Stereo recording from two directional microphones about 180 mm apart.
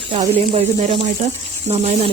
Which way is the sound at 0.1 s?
30° right (ahead or behind).